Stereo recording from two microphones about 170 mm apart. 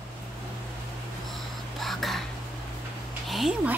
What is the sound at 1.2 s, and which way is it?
Whispering, centre (ahead or behind).